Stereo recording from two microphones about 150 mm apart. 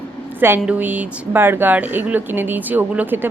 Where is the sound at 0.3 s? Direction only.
15° right (ahead or behind).